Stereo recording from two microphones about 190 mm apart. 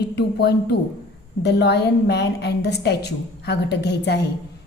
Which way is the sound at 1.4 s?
60° left (ahead or behind).